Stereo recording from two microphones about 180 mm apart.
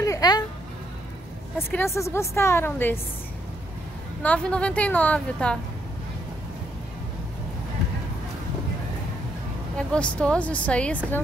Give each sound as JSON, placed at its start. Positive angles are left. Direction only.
{"t": 0.0, "sound": "a sound", "side_deg": 20}
{"t": 1.7, "sound": "a woman's voice", "side_deg": 15}
{"t": 4.2, "sound": "a woman's voice", "side_deg": 5}
{"t": 9.8, "sound": "a woman's voice", "side_deg": 5}